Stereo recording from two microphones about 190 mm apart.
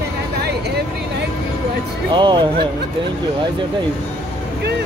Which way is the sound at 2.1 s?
25° right (ahead or behind).